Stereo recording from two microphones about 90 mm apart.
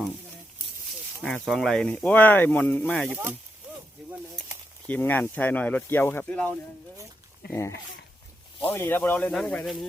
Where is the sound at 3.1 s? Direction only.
20° right (ahead or behind).